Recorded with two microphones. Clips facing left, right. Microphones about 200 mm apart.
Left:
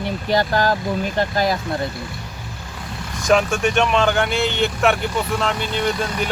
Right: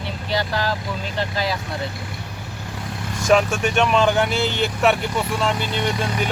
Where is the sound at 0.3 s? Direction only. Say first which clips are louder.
Left 5 dB; 50° left (ahead or behind).